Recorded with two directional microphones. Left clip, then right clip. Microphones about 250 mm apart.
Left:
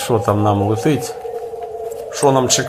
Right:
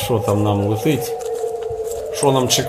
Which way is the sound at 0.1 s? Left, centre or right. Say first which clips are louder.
Left 3 dB; centre.